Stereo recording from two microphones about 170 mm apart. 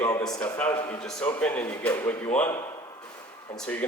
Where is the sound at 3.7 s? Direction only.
10° left (ahead or behind).